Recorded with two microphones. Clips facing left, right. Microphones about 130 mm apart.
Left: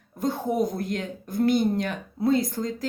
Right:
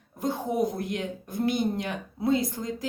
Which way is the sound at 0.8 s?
15° right (ahead or behind).